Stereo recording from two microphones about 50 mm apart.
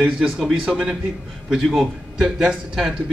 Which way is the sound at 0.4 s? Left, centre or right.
Centre.